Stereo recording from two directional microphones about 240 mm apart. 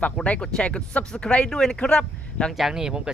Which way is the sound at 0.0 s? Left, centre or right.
Centre.